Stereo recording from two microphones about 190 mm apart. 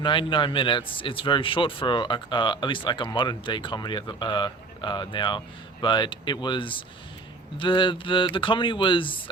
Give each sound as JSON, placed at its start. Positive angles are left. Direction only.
{"t": 0.0, "sound": "a man's voice", "side_deg": 25}